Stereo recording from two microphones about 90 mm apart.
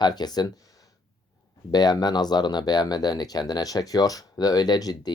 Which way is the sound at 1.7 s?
50° left (ahead or behind).